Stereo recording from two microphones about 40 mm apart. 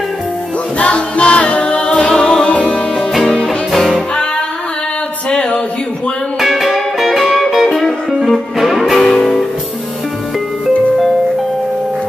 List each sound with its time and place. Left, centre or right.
0.7 s music: left
3.4 s music: centre
3.9 s music: centre
5.3 s a sound: left
6.4 s music: centre